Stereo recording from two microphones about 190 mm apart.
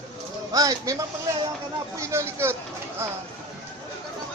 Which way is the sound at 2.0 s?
15° right (ahead or behind).